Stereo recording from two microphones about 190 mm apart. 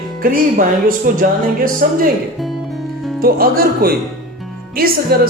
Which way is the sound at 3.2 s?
50° right (ahead or behind).